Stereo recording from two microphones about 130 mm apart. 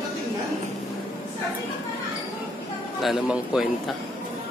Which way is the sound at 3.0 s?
5° right (ahead or behind).